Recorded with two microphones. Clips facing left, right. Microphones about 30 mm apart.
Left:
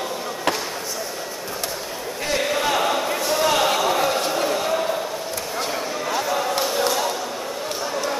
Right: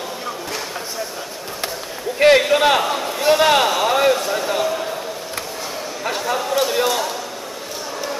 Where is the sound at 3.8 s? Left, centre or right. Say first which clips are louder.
Right 3 dB; right.